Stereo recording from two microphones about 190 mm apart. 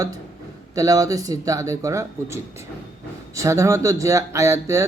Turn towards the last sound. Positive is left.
turn(degrees=-15)  # may be behind; listen again after turning